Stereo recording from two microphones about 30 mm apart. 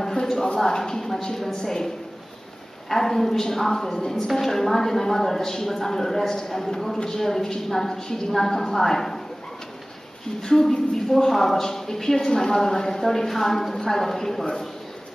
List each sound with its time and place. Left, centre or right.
0.2 s a sound: centre
0.7 s a woman's voice: centre
2.9 s a woman's voice: centre
10.4 s a woman's voice: centre